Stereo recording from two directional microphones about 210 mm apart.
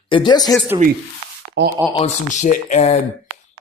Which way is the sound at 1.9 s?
35° left (ahead or behind).